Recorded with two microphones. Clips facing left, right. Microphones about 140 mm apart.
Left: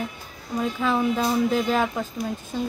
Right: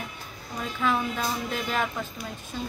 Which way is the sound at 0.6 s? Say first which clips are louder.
Left 4 dB; 30° left (ahead or behind).